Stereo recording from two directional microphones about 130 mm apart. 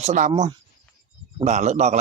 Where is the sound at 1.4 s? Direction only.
65° right (ahead or behind).